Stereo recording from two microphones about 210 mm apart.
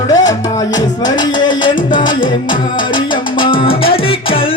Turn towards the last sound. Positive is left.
turn(degrees=25)  # may be behind; listen again after turning